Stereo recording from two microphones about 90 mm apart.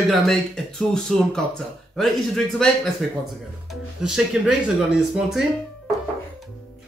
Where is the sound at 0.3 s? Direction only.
5° left (ahead or behind).